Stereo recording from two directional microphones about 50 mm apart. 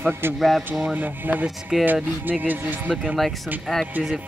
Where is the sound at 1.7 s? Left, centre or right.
Centre.